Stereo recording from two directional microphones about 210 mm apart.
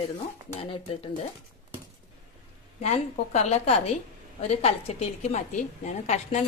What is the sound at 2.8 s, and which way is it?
A woman's voice, 30° left (ahead or behind).